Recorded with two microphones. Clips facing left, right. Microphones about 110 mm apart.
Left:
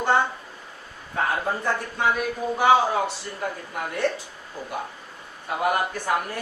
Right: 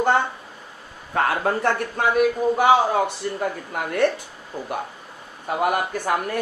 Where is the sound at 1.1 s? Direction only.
70° right (ahead or behind).